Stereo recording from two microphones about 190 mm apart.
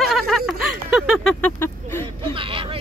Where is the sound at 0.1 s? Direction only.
Centre (ahead or behind).